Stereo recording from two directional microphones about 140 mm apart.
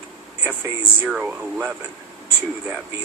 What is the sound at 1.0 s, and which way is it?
Speech, 10° right (ahead or behind).